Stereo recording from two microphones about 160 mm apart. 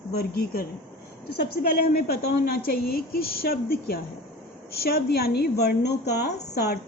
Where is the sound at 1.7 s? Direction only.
75° left (ahead or behind).